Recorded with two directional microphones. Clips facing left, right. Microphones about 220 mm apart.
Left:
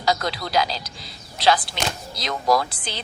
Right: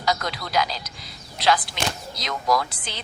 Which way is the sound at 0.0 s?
30° left (ahead or behind).